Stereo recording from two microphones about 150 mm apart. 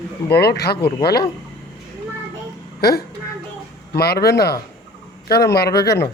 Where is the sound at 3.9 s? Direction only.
90° left.